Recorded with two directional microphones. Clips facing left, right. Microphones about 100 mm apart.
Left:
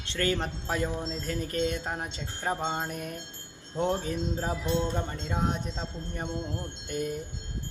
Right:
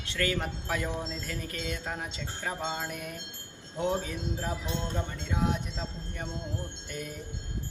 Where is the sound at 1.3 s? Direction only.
35° left (ahead or behind).